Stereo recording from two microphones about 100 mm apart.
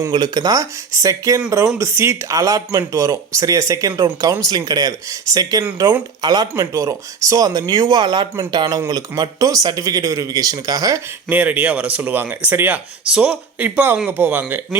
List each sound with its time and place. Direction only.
0.1 s speech: 45° right (ahead or behind)
6.6 s speech: 30° right (ahead or behind)
11.3 s speech: 15° right (ahead or behind)